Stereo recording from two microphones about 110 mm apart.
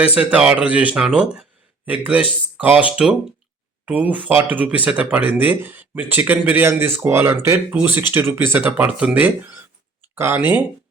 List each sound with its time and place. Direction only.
0.0 s speech: 10° right (ahead or behind)